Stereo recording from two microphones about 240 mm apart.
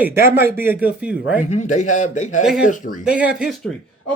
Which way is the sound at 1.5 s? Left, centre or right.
Left.